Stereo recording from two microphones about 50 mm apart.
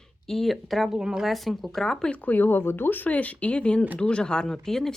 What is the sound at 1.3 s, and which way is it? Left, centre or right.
Speech, centre.